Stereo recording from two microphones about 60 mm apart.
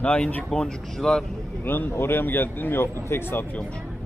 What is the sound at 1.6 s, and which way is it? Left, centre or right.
Speech, left.